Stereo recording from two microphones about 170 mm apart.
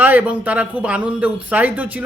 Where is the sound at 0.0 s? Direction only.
10° right (ahead or behind).